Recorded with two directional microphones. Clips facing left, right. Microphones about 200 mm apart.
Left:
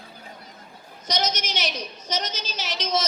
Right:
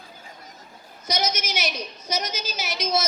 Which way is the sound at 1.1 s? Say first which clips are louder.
Even; 10° right (ahead or behind).